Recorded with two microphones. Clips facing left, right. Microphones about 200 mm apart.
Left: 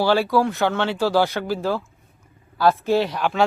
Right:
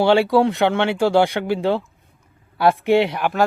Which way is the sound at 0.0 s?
25° right (ahead or behind).